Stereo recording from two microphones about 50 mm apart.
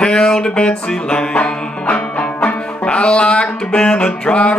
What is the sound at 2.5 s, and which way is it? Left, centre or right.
Music, left.